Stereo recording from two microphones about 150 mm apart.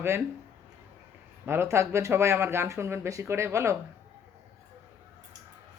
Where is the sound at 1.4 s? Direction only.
15° right (ahead or behind).